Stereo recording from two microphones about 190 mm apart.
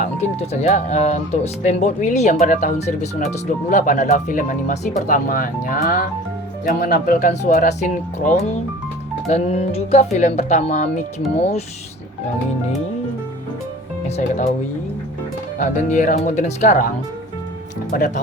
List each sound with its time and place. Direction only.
0.0 s speech: 35° left (ahead or behind)
14.2 s speech: 40° left (ahead or behind)
15.6 s speech: 40° left (ahead or behind)
17.9 s speech: 45° left (ahead or behind)